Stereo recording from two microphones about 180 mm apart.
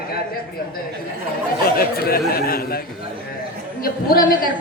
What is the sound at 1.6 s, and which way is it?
Speech, 55° left (ahead or behind).